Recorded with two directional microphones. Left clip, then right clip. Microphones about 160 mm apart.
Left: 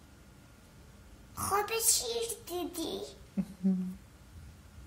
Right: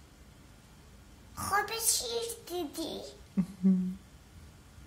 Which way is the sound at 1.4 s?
10° right (ahead or behind).